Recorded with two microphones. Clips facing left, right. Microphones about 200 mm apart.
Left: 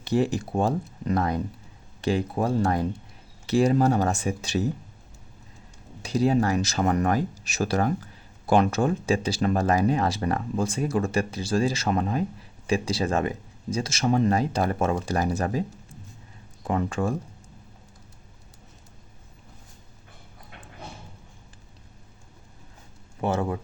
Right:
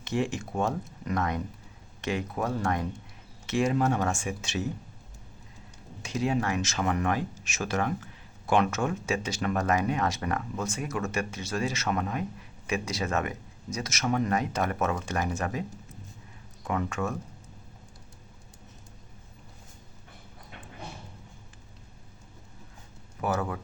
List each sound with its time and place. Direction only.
0.0 s speech: 35° left (ahead or behind)
6.0 s speech: 35° left (ahead or behind)
23.2 s speech: 25° left (ahead or behind)